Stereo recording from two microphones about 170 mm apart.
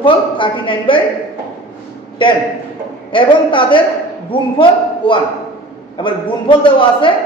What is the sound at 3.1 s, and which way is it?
A woman's voice, 30° left (ahead or behind).